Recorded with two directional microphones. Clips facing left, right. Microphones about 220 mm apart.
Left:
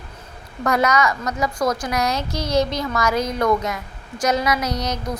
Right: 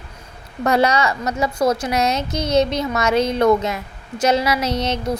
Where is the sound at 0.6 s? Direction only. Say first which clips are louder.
Right 2 dB; 30° right (ahead or behind).